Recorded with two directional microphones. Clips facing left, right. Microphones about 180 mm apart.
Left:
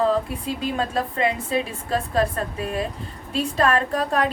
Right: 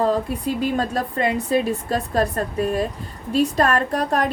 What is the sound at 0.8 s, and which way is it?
A woman's voice, 40° right (ahead or behind).